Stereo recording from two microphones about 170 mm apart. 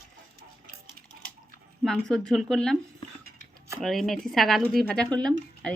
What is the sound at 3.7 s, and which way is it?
Speech, centre (ahead or behind).